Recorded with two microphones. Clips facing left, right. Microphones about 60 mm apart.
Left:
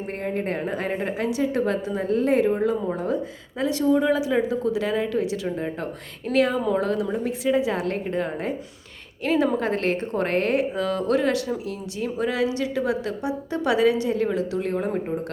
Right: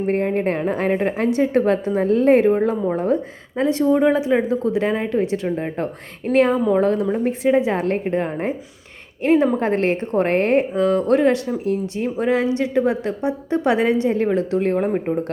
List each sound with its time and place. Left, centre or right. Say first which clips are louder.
0.1 s a woman's voice: right 6 dB; right